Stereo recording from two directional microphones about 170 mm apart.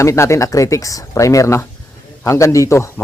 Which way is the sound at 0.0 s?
15° left (ahead or behind).